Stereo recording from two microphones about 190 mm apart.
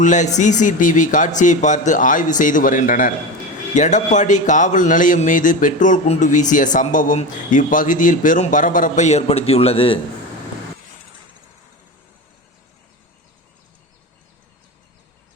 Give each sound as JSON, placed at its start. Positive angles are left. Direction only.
{"t": 0.0, "sound": "speech", "side_deg": 40}